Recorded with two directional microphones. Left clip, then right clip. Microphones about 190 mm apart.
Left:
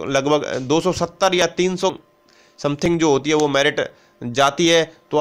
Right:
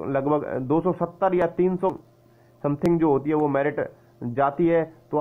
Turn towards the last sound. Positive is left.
turn(degrees=40)  # may be behind; listen again after turning